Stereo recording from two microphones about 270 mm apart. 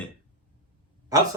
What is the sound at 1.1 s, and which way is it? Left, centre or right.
Speech, centre.